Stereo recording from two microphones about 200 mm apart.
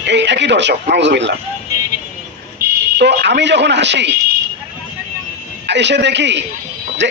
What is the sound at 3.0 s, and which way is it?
Speech, 60° right (ahead or behind).